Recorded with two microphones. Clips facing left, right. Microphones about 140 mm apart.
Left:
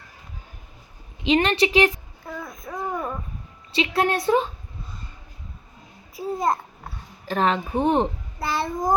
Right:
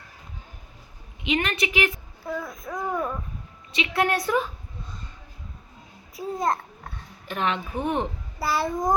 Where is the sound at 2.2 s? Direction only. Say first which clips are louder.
Right 3 dB; centre (ahead or behind).